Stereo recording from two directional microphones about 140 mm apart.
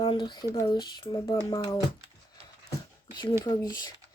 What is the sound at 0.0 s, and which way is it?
Speech, 35° left (ahead or behind).